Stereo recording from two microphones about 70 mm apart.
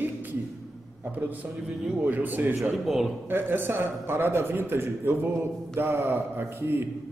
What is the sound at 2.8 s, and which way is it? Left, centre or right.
Speech, centre.